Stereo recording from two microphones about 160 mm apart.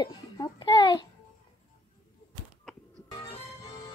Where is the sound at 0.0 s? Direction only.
25° left (ahead or behind).